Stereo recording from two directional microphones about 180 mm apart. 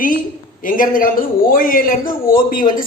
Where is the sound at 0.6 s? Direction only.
50° left (ahead or behind).